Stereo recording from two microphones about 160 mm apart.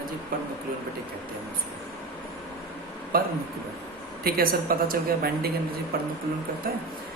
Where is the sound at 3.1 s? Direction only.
75° right (ahead or behind).